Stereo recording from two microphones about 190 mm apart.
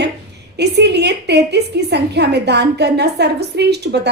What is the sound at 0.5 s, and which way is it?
A woman's voice, 60° right (ahead or behind).